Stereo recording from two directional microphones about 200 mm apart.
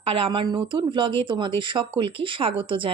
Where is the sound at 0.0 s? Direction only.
25° right (ahead or behind).